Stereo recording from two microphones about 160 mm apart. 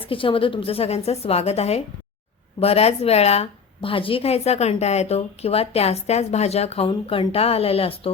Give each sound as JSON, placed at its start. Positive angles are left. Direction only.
{"t": 0.0, "sound": "a woman's voice", "side_deg": 35}